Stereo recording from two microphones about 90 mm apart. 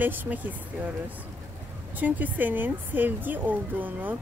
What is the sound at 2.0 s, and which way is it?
Speech, 20° right (ahead or behind).